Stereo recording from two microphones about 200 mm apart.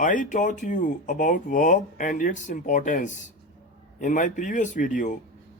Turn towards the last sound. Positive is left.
turn(degrees=40)  # may be behind; listen again after turning